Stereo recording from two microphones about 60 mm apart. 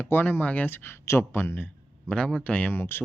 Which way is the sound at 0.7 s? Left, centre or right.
Left.